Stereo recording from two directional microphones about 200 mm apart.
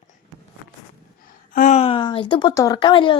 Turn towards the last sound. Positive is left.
turn(degrees=25)  # may be behind; listen again after turning